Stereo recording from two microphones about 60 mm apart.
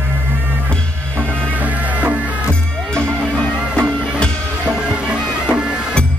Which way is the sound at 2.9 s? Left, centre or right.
Centre.